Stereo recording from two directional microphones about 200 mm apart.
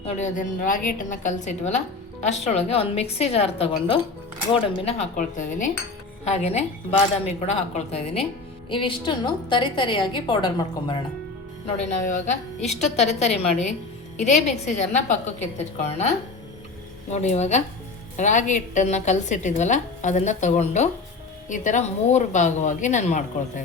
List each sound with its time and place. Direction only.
0.0 s a woman's voice: 40° left (ahead or behind)
4.9 s a woman's voice: 35° left (ahead or behind)
11.6 s a woman's voice: 35° left (ahead or behind)